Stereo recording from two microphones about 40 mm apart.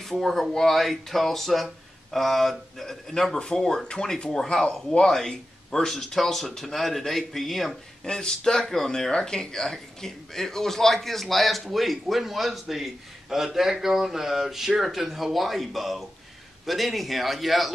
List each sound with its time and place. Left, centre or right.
0.2 s speech: centre
3.3 s speech: centre
8.0 s speech: centre